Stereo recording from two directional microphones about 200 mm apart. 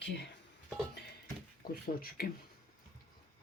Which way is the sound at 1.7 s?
45° left (ahead or behind).